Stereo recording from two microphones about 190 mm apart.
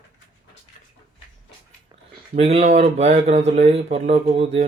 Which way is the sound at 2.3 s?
35° right (ahead or behind).